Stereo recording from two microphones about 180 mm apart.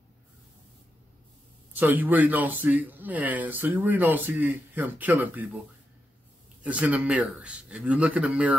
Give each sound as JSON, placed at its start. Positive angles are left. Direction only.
{"t": 1.7, "sound": "speech", "side_deg": -10}
{"t": 6.6, "sound": "speech", "side_deg": -5}